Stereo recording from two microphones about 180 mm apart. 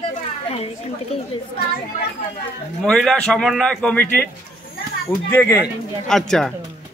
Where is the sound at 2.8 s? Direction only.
5° left (ahead or behind).